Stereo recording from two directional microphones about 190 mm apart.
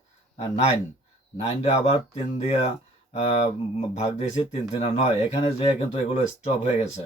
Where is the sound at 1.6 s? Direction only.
35° left (ahead or behind).